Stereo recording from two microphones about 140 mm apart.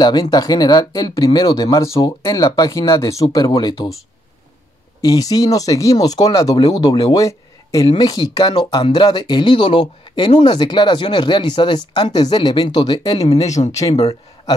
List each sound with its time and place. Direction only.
0.0 s speech: 30° left (ahead or behind)
5.1 s speech: 25° left (ahead or behind)
13.6 s speech: 40° left (ahead or behind)